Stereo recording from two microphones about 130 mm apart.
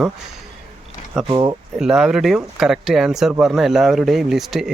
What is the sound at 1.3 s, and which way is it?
Speech, 35° right (ahead or behind).